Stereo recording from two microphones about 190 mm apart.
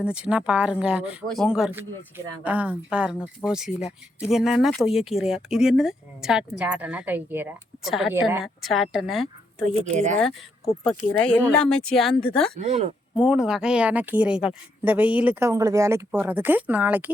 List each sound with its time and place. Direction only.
0.0 s speech: 5° right (ahead or behind)
9.9 s speech: 40° right (ahead or behind)
10.8 s speech: 5° left (ahead or behind)
12.5 s speech: 35° right (ahead or behind)
13.1 s speech: 5° right (ahead or behind)